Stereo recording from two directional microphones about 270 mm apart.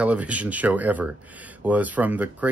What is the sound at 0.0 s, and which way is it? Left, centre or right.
Speech, centre.